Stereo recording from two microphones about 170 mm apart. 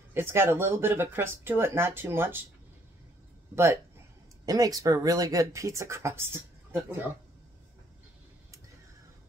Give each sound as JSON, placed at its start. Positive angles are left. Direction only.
{"t": 0.1, "sound": "speech", "side_deg": -15}
{"t": 4.5, "sound": "speech", "side_deg": -20}